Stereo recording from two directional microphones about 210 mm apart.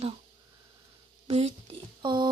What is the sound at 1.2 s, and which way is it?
Speech, 30° right (ahead or behind).